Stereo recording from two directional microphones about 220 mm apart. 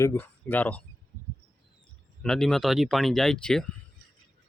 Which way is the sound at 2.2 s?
Centre (ahead or behind).